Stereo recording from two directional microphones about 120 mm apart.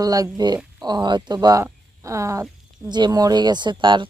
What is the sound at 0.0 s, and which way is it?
Speech, 30° right (ahead or behind).